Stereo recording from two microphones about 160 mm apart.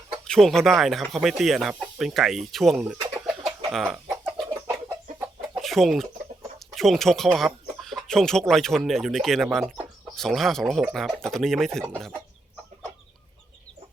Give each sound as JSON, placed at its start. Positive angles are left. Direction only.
{"t": 0.3, "sound": "speech", "side_deg": 5}
{"t": 3.0, "sound": "chicken", "side_deg": -20}
{"t": 3.7, "sound": "speech", "side_deg": 0}
{"t": 5.5, "sound": "chicken", "side_deg": 0}
{"t": 6.7, "sound": "speech", "side_deg": 0}